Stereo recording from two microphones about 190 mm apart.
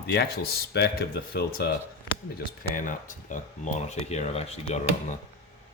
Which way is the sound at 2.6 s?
45° left (ahead or behind).